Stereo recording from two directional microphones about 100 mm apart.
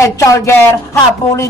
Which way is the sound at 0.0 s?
30° left (ahead or behind).